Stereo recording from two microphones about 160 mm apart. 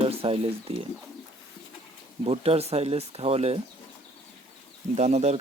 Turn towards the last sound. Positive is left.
turn(degrees=-45)  # may be behind; listen again after turning